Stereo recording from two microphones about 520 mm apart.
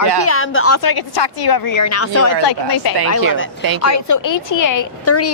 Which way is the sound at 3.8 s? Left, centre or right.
Left.